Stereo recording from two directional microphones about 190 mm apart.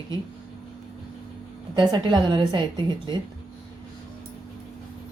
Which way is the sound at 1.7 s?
20° right (ahead or behind).